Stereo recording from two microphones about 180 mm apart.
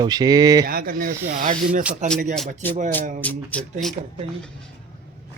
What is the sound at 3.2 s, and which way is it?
Speech, 10° left (ahead or behind).